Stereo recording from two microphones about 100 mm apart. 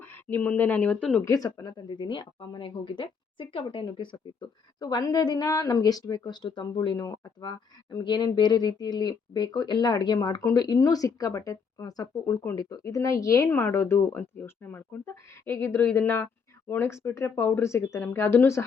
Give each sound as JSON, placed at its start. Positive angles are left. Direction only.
{"t": 0.0, "sound": "speech", "side_deg": 20}
{"t": 1.2, "sound": "speech", "side_deg": 30}
{"t": 1.9, "sound": "a woman's voice", "side_deg": 50}